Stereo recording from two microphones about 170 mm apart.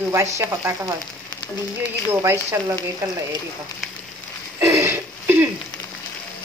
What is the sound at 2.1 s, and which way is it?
Speech, 15° right (ahead or behind).